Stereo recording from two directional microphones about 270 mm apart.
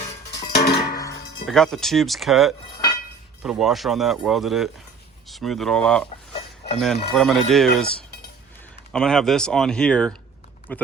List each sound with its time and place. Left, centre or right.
0.5 s music: left
1.5 s speech: centre
8.9 s speech: centre